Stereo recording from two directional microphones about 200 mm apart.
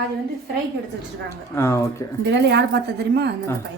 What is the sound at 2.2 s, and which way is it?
A woman's voice, 60° right (ahead or behind).